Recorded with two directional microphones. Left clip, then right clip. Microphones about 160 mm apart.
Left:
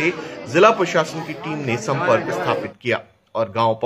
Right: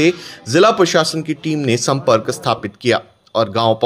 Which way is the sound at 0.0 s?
25° right (ahead or behind).